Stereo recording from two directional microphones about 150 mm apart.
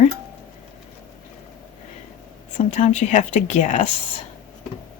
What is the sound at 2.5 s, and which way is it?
Speech, 55° left (ahead or behind).